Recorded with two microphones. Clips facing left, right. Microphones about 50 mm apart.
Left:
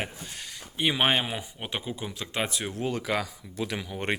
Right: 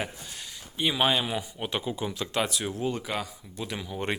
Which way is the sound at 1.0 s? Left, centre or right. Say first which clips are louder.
Right 1 dB; left.